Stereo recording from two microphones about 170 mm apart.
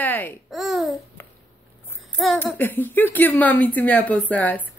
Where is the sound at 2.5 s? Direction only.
10° left (ahead or behind).